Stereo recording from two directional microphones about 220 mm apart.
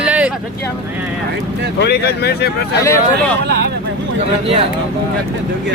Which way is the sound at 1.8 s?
50° left (ahead or behind).